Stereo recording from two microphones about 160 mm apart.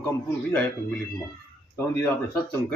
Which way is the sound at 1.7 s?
15° left (ahead or behind).